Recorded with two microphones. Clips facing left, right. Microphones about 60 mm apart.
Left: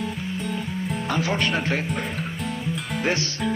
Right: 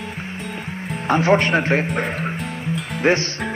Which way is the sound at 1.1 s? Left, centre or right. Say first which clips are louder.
Right 9 dB; right.